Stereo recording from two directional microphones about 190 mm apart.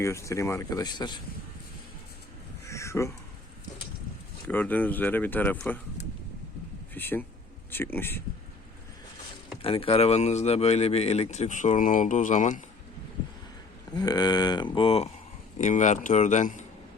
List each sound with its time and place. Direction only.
0.0 s speech: 15° left (ahead or behind)
2.6 s a sound: 15° left (ahead or behind)
4.4 s speech: 10° left (ahead or behind)
6.9 s speech: 10° left (ahead or behind)
9.6 s speech: 30° left (ahead or behind)
13.9 s speech: 20° left (ahead or behind); by 16.6 s 40° left (ahead or behind)